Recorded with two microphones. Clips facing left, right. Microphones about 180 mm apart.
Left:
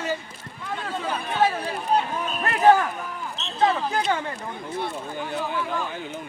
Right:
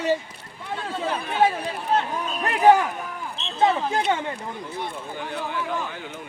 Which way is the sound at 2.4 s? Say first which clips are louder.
Right 1 dB; 15° right (ahead or behind).